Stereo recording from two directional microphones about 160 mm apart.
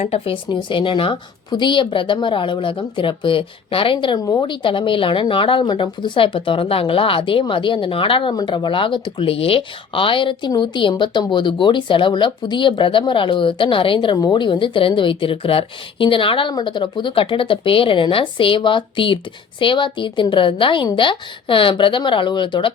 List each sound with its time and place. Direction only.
0.0 s speech: 40° left (ahead or behind)
0.4 s speech: 30° left (ahead or behind)